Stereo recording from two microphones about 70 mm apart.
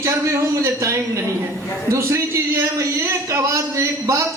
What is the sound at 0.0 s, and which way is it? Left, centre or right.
Speech, right.